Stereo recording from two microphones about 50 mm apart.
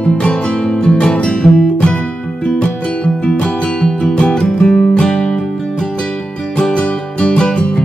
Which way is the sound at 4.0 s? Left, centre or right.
Centre.